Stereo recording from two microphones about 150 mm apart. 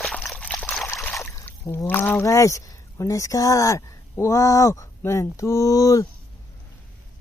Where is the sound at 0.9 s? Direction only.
15° left (ahead or behind).